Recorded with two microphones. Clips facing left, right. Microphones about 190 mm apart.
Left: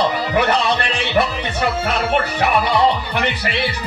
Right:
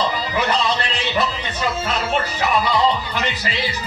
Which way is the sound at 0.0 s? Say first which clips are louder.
Left 4 dB; 60° left (ahead or behind).